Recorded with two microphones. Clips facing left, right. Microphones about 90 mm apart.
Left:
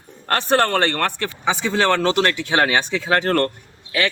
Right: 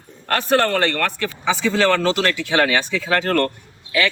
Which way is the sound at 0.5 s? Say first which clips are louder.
Even; 30° left (ahead or behind).